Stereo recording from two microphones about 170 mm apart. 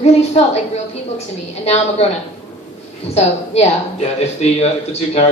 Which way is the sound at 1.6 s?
40° left (ahead or behind).